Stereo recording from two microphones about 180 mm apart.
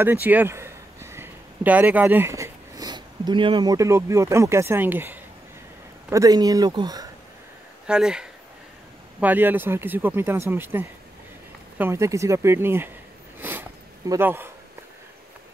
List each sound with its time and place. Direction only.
0.0 s speech: 10° right (ahead or behind)
7.8 s speech: 5° right (ahead or behind)
13.4 s sniff: 10° right (ahead or behind)